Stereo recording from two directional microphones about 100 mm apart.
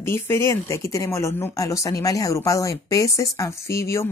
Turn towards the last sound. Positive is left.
turn(degrees=30)  # may be behind; listen again after turning